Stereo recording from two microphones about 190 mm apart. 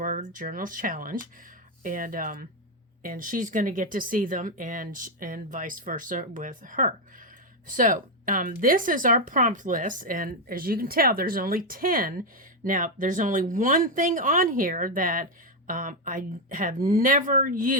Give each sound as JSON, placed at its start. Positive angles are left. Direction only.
{"t": 0.0, "sound": "speech", "side_deg": -45}